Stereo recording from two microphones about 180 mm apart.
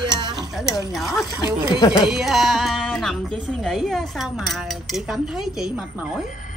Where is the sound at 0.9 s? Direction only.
Centre (ahead or behind).